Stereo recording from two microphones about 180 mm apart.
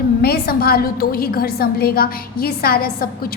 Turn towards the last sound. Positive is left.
turn(degrees=55)  # may be behind; listen again after turning